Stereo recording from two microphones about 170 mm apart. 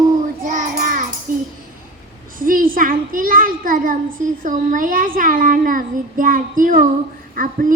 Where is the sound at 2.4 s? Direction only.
55° right (ahead or behind).